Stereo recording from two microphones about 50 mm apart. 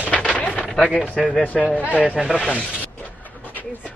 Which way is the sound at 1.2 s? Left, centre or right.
Left.